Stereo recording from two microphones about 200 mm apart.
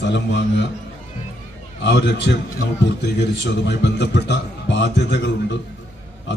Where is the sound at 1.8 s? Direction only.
60° left (ahead or behind).